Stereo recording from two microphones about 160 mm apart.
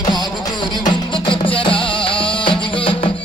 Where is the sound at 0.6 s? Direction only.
25° left (ahead or behind).